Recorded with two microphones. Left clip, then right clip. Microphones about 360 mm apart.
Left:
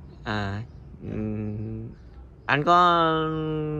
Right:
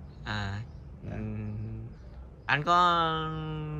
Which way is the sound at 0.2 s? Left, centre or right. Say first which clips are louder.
Left 6 dB; centre.